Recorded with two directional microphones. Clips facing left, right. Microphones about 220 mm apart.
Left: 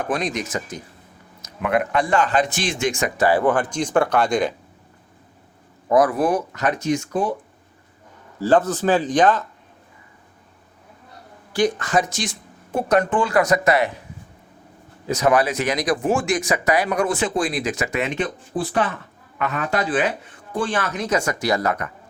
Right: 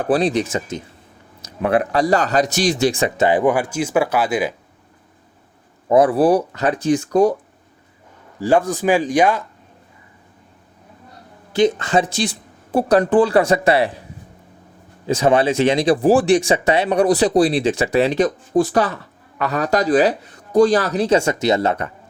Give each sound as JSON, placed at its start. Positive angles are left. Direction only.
{"t": 0.0, "sound": "speech", "side_deg": -30}
{"t": 5.9, "sound": "speech", "side_deg": -30}
{"t": 8.4, "sound": "speech", "side_deg": -10}
{"t": 11.5, "sound": "speech", "side_deg": -25}
{"t": 15.0, "sound": "speech", "side_deg": -30}